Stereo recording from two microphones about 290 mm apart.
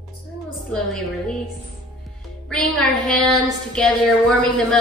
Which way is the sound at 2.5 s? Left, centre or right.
Centre.